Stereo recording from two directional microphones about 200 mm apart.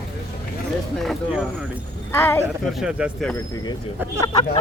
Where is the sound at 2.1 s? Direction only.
10° left (ahead or behind).